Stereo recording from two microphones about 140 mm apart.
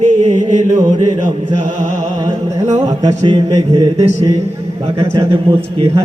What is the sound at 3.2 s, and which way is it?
Speech, 35° right (ahead or behind).